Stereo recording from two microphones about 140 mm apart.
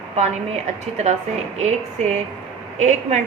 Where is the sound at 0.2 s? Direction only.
55° right (ahead or behind).